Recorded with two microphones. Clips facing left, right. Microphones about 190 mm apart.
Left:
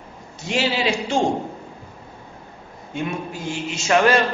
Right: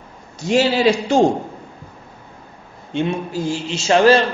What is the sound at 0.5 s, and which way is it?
Speech, 40° right (ahead or behind).